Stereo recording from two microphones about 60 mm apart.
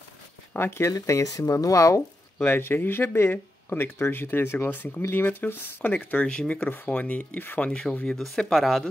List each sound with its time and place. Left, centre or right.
0.5 s speech: left
0.9 s speech: left
2.3 s speech: left; by 7.2 s centre
7.3 s speech: left
7.9 s speech: left
8.2 s speech: centre